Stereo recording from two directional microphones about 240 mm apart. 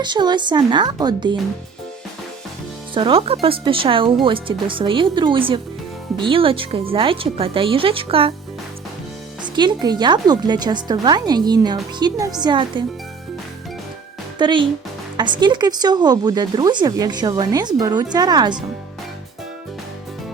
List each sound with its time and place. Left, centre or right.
0.0 s speech: centre
2.9 s speech: right
9.4 s speech: centre
14.3 s speech: centre